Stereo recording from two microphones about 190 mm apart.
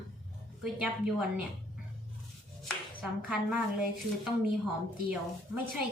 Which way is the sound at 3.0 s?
5° right (ahead or behind).